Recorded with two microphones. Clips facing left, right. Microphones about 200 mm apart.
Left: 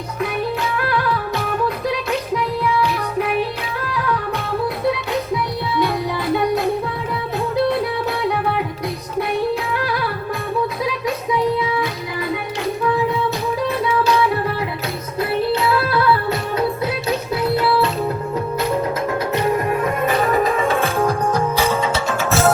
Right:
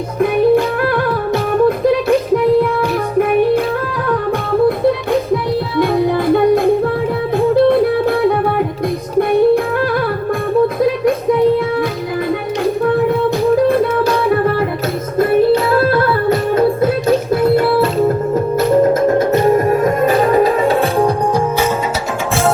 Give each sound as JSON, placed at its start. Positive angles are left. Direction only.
{"t": 0.2, "sound": "music", "side_deg": -50}
{"t": 5.8, "sound": "music", "side_deg": -50}
{"t": 10.8, "sound": "music", "side_deg": -50}
{"t": 21.0, "sound": "music", "side_deg": -20}